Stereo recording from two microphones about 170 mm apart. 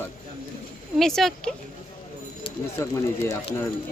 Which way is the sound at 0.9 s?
Centre (ahead or behind).